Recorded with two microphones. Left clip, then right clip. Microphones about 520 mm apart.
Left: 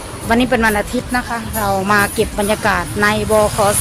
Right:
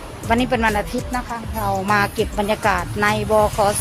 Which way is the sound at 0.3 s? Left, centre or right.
Right.